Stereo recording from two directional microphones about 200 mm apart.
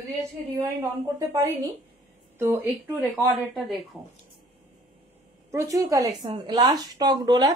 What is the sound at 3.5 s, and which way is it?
Speech, centre (ahead or behind).